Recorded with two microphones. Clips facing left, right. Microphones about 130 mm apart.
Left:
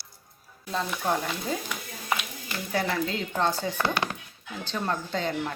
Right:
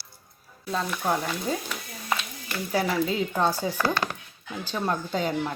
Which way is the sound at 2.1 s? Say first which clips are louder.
Right 1 dB; 10° left (ahead or behind).